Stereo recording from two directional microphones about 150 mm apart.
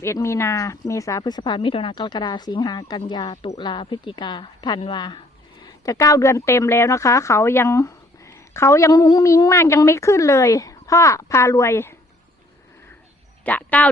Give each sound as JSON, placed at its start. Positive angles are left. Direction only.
{"t": 0.0, "sound": "a woman's voice", "side_deg": 20}
{"t": 13.4, "sound": "speech", "side_deg": 10}